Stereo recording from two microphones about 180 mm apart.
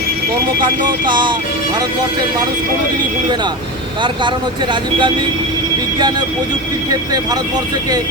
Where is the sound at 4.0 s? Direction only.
25° right (ahead or behind).